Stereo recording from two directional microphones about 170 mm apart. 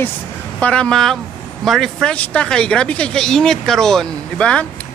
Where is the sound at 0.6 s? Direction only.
5° left (ahead or behind).